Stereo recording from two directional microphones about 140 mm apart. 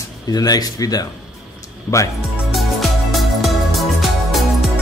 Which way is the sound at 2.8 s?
Centre (ahead or behind).